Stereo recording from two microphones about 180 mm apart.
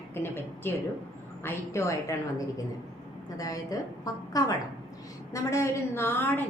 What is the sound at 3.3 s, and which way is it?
A woman's voice, 20° left (ahead or behind).